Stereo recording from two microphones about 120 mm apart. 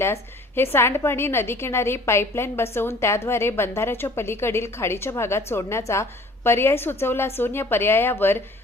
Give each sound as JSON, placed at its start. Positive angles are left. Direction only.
{"t": 0.0, "sound": "a woman's voice", "side_deg": 20}